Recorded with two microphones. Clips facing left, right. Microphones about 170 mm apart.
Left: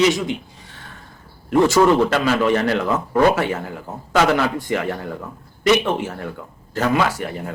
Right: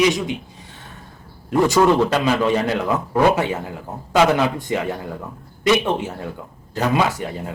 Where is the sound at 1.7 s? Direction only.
15° right (ahead or behind).